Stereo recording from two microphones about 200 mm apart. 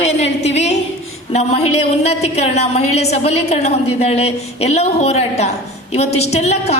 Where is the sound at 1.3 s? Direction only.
30° left (ahead or behind).